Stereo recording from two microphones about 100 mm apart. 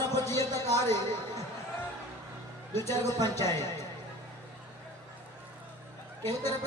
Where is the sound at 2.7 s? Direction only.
25° left (ahead or behind).